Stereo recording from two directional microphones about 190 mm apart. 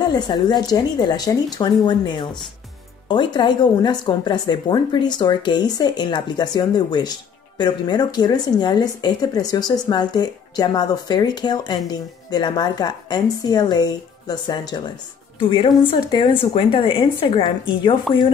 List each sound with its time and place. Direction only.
0.1 s a woman's voice: 20° left (ahead or behind)